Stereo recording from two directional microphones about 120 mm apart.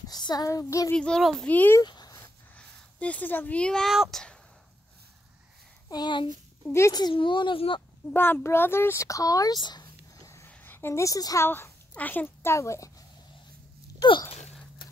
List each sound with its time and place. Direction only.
0.1 s child singing: 35° left (ahead or behind)
0.9 s a child's voice: 5° left (ahead or behind)
1.8 s a sound: 35° left (ahead or behind)
2.5 s speech: 10° left (ahead or behind)
5.9 s speech: 35° left (ahead or behind)
6.7 s a child's voice: 25° left (ahead or behind)
7.0 s a child's voice: 40° left (ahead or behind)
8.1 s a child's voice: 15° left (ahead or behind)
11.4 s a child's voice: 20° left (ahead or behind)
14.8 s a sound: 40° left (ahead or behind)